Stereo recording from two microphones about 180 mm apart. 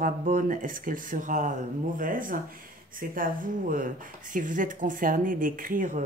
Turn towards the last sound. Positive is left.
turn(degrees=-50)  # may be behind; listen again after turning